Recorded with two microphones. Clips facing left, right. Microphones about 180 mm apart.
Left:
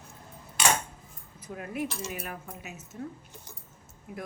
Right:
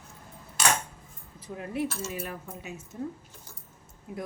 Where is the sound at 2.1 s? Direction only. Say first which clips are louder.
Right 2 dB; 30° right (ahead or behind).